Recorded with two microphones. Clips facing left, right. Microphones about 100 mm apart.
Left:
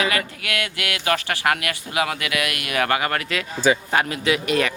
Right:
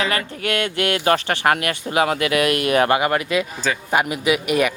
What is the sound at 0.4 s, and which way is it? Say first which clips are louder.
Speech: right 6 dB; 30° right (ahead or behind).